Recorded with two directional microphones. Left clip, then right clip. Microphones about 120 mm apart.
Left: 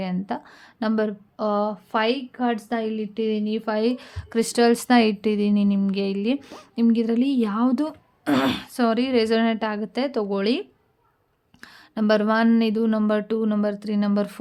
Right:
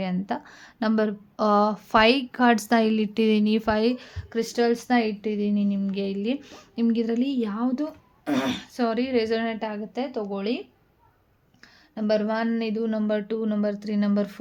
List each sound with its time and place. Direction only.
0.0 s speech: 5° left (ahead or behind)
1.4 s speech: 20° right (ahead or behind)
2.3 s a woman's voice: 45° right (ahead or behind)
3.7 s speech: 5° right (ahead or behind)
3.9 s a woman's voice: 20° left (ahead or behind)
4.3 s a woman's voice: 45° left (ahead or behind)
7.6 s a woman's voice: 60° left (ahead or behind); by 10.6 s 90° left
11.6 s a woman's voice: 60° left (ahead or behind); by 14.3 s 30° left (ahead or behind)